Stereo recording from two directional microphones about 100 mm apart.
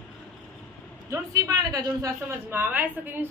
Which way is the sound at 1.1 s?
30° right (ahead or behind).